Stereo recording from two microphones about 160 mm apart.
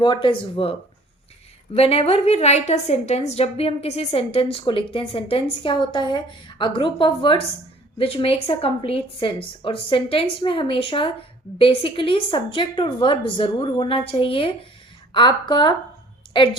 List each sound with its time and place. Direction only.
0.0 s a woman's voice: 30° left (ahead or behind)